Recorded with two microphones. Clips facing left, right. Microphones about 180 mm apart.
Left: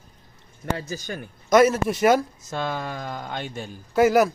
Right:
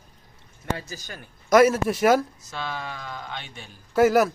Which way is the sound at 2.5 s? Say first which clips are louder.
Left 5 dB; 50° left (ahead or behind).